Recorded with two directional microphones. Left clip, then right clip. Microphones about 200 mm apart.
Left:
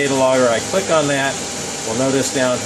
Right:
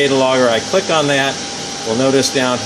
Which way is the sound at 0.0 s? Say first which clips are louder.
Right 2 dB; 35° right (ahead or behind).